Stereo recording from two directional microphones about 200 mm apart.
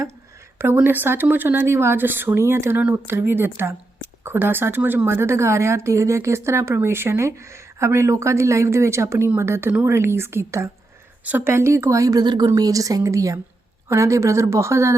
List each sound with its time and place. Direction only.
0.6 s a woman's voice: 10° right (ahead or behind)